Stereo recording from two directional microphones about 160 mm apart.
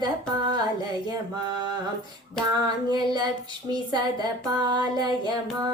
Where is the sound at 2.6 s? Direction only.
25° right (ahead or behind).